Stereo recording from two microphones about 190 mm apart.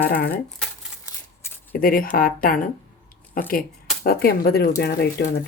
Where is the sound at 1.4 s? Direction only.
10° left (ahead or behind).